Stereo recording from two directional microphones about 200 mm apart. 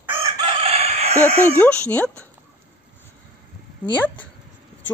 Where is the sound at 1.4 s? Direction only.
10° left (ahead or behind).